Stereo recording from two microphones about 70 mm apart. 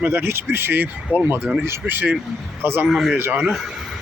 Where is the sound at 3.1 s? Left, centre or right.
Right.